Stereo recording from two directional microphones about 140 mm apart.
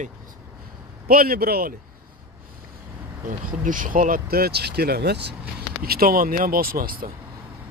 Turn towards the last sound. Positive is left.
turn(degrees=-90)